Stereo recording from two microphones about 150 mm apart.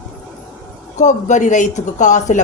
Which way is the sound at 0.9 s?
55° left (ahead or behind).